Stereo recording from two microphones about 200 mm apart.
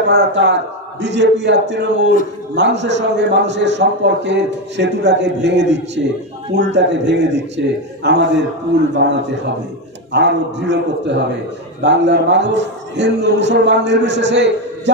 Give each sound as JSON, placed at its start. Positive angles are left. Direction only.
{"t": 0.0, "sound": "a man's voice", "side_deg": -55}